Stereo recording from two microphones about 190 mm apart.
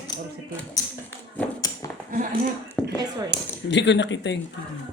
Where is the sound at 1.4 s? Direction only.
10° left (ahead or behind).